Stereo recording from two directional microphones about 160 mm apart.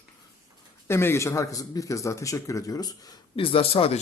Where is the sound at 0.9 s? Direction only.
15° left (ahead or behind).